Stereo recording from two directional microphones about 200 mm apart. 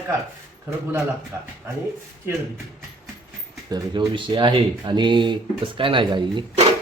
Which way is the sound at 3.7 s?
25° right (ahead or behind).